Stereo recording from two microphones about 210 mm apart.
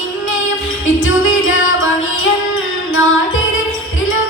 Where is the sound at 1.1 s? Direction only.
70° left (ahead or behind).